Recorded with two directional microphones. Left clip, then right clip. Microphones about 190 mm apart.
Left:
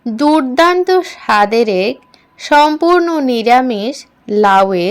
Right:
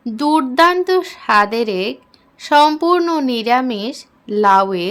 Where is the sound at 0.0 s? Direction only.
15° left (ahead or behind).